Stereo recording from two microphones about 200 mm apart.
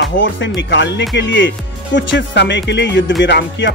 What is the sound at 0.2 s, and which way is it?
Speech, 65° left (ahead or behind).